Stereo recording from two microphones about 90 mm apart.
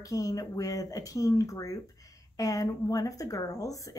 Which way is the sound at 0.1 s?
40° left (ahead or behind).